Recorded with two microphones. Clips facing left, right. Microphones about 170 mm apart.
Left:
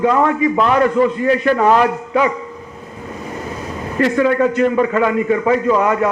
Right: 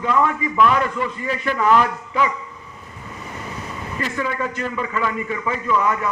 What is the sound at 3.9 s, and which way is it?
Speech, 60° left (ahead or behind).